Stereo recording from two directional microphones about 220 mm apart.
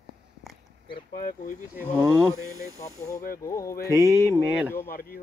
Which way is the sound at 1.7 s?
10° right (ahead or behind).